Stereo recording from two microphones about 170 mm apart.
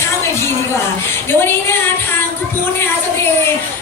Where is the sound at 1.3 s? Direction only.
15° left (ahead or behind).